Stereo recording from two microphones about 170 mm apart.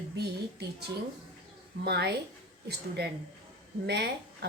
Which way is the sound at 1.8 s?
75° right (ahead or behind).